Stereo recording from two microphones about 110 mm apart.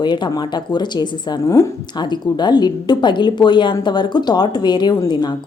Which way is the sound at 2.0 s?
40° left (ahead or behind).